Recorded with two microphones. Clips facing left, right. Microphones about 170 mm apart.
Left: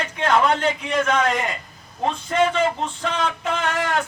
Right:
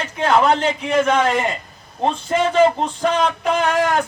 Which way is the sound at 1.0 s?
30° right (ahead or behind).